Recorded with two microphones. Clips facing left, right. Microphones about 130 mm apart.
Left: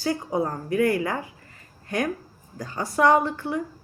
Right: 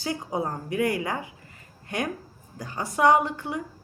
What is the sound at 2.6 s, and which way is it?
Speech, 20° right (ahead or behind).